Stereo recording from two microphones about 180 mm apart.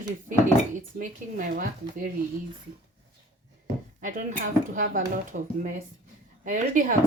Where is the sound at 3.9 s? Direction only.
45° right (ahead or behind).